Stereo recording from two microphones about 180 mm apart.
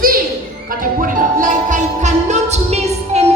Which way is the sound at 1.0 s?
45° right (ahead or behind).